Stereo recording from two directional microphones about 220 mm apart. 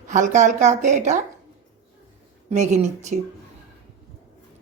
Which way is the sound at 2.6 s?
30° right (ahead or behind).